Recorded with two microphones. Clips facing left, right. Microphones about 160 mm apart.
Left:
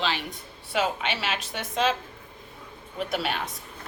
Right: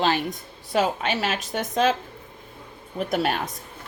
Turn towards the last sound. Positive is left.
turn(degrees=-45)  # may be behind; listen again after turning